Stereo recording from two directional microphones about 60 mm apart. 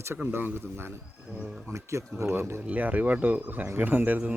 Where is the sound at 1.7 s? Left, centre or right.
Right.